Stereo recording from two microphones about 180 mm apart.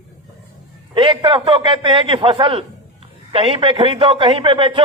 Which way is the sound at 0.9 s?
25° right (ahead or behind).